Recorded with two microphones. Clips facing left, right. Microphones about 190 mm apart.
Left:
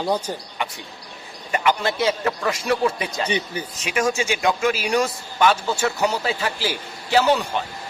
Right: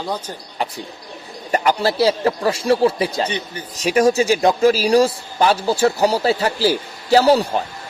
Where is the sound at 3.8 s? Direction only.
35° right (ahead or behind).